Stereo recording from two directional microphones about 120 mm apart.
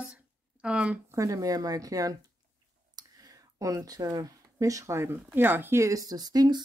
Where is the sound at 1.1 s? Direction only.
30° right (ahead or behind).